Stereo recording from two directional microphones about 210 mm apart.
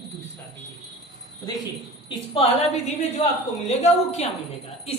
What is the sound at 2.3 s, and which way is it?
A woman's voice, 30° left (ahead or behind).